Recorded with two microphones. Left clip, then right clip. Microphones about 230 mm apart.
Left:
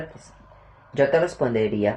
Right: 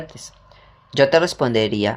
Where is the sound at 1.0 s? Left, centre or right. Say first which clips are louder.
Right 4 dB; right.